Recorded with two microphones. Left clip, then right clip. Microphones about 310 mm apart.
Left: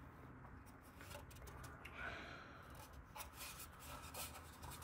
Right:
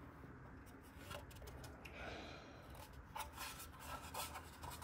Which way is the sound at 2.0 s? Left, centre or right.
Centre.